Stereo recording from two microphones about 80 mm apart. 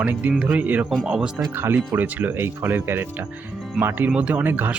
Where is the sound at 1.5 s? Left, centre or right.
Right.